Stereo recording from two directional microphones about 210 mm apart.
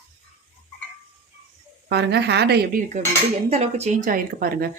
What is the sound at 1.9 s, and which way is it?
Speech, 55° right (ahead or behind).